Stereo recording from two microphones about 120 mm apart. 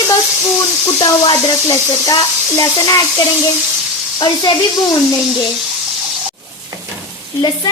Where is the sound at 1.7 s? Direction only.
30° left (ahead or behind).